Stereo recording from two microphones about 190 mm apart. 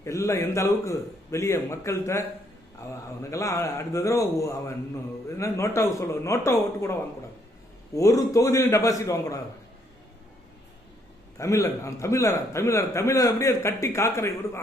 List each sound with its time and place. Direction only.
0.0 s a man's voice: 15° left (ahead or behind)
7.9 s a man's voice: 15° left (ahead or behind)
11.3 s a man's voice: 15° left (ahead or behind)